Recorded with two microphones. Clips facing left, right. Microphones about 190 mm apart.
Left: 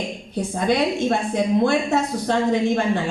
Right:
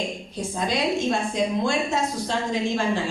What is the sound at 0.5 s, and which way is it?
Speech, 60° left (ahead or behind).